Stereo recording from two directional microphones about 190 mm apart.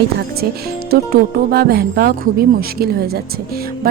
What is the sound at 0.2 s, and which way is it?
Speech, 55° right (ahead or behind).